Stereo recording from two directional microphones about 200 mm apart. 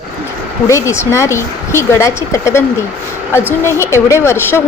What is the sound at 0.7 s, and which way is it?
A woman's voice, 15° left (ahead or behind).